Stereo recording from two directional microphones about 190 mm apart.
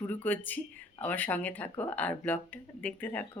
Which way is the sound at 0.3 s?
10° left (ahead or behind).